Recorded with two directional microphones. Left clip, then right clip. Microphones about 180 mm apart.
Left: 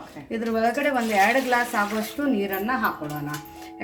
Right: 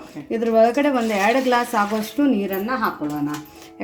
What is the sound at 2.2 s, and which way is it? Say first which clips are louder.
Speech: right 7 dB; 45° right (ahead or behind).